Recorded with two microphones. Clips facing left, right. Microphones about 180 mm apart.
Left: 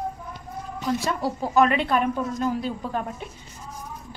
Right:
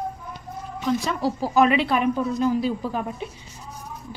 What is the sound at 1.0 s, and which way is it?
A woman's voice, centre (ahead or behind).